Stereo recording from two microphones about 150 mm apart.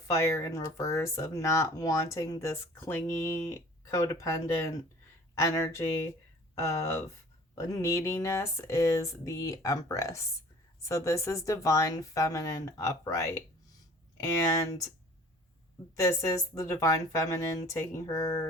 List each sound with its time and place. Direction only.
0.1 s speech: 20° left (ahead or behind)
16.0 s speech: 20° left (ahead or behind)